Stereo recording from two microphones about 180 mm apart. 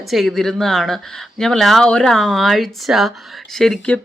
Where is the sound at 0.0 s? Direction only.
Centre (ahead or behind).